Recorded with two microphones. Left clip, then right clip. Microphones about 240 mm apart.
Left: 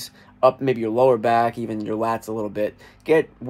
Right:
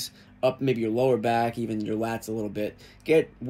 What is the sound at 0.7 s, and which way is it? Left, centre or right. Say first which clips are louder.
Speech: left 6 dB; centre.